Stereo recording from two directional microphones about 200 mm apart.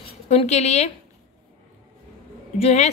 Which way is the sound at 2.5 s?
35° left (ahead or behind).